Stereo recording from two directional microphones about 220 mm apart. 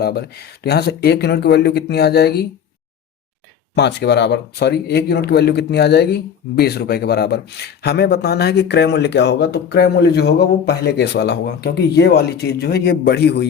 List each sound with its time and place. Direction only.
0.0 s speech: 45° left (ahead or behind)
3.8 s speech: 50° left (ahead or behind)